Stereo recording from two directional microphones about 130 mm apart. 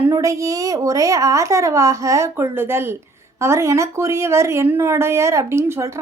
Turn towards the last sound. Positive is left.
turn(degrees=-20)  # may be behind; listen again after turning